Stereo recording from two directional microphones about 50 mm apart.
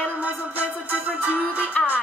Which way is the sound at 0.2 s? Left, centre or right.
Right.